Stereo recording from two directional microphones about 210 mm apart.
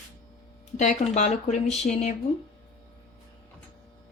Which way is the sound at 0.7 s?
35° left (ahead or behind).